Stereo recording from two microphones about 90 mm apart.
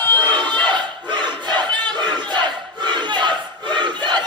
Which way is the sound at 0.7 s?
60° right (ahead or behind).